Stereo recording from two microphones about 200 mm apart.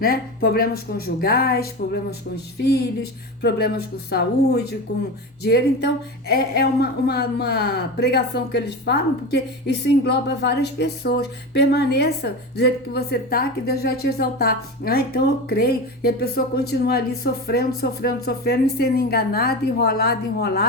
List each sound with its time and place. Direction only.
0.0 s speech: 50° left (ahead or behind)